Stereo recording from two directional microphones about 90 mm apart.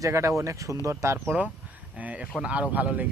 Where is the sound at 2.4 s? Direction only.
15° right (ahead or behind).